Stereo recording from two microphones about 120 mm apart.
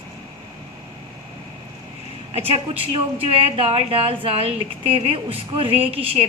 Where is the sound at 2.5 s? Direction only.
50° right (ahead or behind).